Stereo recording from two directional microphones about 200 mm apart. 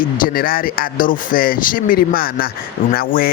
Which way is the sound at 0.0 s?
45° left (ahead or behind).